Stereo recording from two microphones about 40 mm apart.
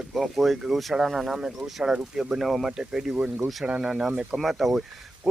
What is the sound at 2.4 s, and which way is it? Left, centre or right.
Speech, centre.